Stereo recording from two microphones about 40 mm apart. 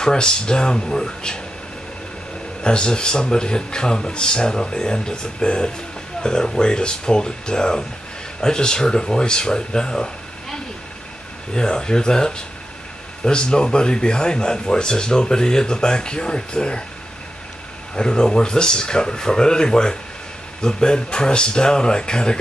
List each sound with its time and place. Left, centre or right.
0.0 s speech: centre
2.6 s speech: left
17.9 s speech: left